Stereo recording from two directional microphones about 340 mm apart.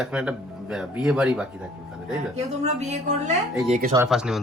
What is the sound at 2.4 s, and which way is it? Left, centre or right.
Speech, centre.